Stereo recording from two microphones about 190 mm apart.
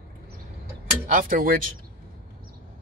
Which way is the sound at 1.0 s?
45° right (ahead or behind).